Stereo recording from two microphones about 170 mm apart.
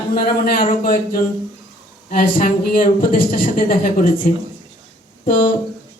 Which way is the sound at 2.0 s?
55° left (ahead or behind).